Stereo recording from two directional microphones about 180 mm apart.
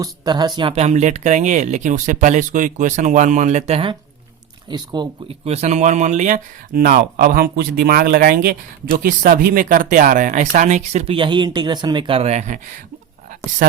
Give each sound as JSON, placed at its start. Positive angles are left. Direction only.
{"t": 0.0, "sound": "speech", "side_deg": -25}
{"t": 5.5, "sound": "speech", "side_deg": -35}